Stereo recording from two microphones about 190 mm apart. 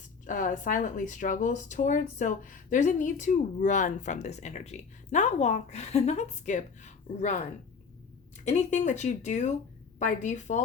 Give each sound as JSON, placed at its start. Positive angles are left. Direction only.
{"t": 0.3, "sound": "speech", "side_deg": 45}
{"t": 8.4, "sound": "speech", "side_deg": 35}